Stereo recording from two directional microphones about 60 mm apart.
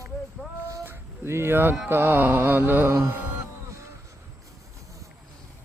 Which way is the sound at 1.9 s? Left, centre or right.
Right.